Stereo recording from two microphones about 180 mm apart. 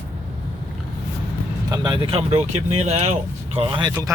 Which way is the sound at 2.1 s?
35° right (ahead or behind).